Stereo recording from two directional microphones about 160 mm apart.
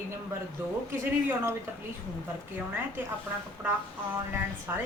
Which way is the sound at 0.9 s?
15° right (ahead or behind).